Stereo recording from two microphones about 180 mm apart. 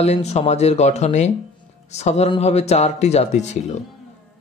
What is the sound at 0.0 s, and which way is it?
Speech, 35° left (ahead or behind).